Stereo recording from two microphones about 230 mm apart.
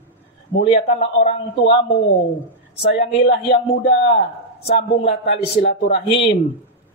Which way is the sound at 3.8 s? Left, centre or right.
Left.